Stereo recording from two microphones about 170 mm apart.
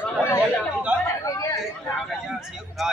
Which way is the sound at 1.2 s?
20° left (ahead or behind).